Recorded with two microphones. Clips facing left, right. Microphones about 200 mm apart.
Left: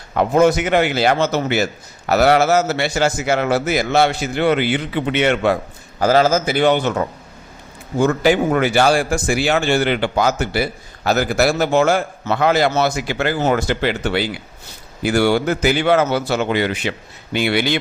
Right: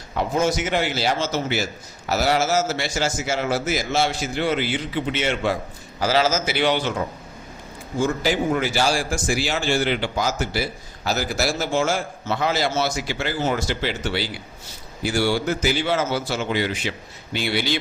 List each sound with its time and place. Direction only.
0.1 s a man's voice: 60° left (ahead or behind)